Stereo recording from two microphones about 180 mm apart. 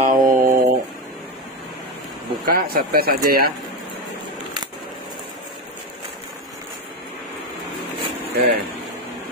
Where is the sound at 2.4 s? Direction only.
55° right (ahead or behind).